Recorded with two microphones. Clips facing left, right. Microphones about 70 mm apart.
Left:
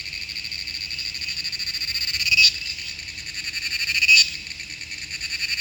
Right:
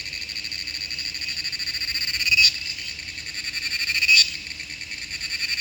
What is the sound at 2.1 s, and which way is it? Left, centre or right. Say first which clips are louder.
Frog: left 1 dB; right.